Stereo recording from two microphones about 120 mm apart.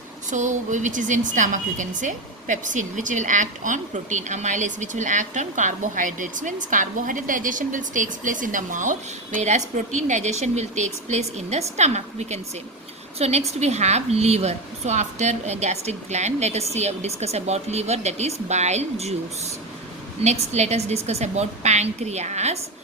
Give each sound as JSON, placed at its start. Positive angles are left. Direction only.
{"t": 0.3, "sound": "a woman's voice", "side_deg": -90}